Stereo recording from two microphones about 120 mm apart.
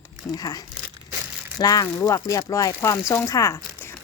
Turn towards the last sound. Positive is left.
turn(degrees=25)  # may be behind; listen again after turning